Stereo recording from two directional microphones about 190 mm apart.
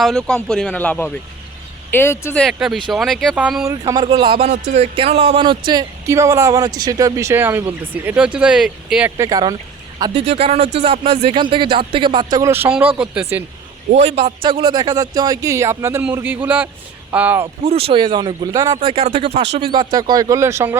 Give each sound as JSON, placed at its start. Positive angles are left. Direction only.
{"t": 0.0, "sound": "speech", "side_deg": 5}
{"t": 2.4, "sound": "speech", "side_deg": 0}
{"t": 3.7, "sound": "a man's voice", "side_deg": -20}
{"t": 10.2, "sound": "a man's voice", "side_deg": -30}
{"t": 13.9, "sound": "a man's voice", "side_deg": -35}
{"t": 17.7, "sound": "a man's voice", "side_deg": -30}